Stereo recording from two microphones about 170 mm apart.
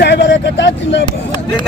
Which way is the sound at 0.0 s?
90° left.